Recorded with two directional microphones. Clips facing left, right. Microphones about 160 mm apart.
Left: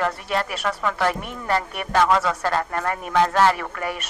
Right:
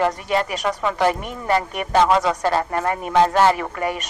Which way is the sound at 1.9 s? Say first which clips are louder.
Right 2 dB; 20° right (ahead or behind).